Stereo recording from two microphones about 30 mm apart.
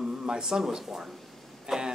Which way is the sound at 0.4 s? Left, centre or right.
Centre.